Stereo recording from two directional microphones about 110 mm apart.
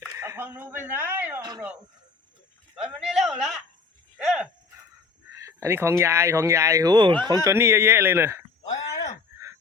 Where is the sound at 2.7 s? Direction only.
5° right (ahead or behind).